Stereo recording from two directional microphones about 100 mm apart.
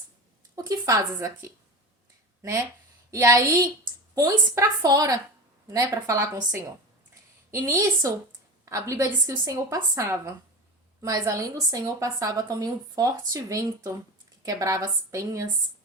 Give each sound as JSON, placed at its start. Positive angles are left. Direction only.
{"t": 0.5, "sound": "a woman's voice", "side_deg": -35}
{"t": 3.1, "sound": "a woman's voice", "side_deg": -30}
{"t": 7.6, "sound": "a woman's voice", "side_deg": -35}